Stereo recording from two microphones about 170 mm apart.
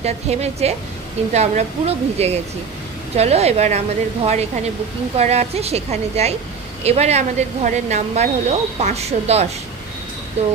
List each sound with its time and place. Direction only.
0.0 s speech: 40° right (ahead or behind)